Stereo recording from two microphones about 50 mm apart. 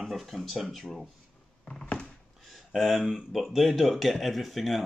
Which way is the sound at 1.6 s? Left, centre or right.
Centre.